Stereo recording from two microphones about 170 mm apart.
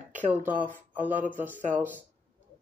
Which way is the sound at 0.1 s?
10° right (ahead or behind).